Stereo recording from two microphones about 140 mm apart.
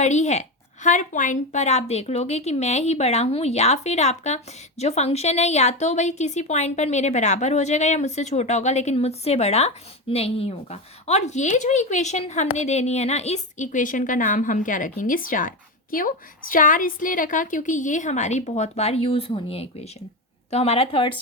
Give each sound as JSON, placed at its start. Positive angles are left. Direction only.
{"t": 0.0, "sound": "a woman's voice", "side_deg": 55}